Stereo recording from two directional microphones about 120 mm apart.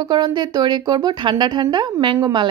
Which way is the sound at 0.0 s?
35° right (ahead or behind).